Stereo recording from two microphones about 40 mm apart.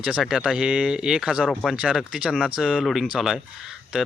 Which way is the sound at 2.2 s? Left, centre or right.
Right.